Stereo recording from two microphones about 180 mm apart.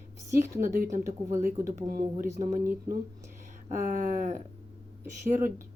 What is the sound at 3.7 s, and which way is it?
Speech, 50° right (ahead or behind).